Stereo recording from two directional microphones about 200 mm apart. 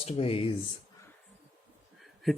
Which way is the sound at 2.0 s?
Centre (ahead or behind).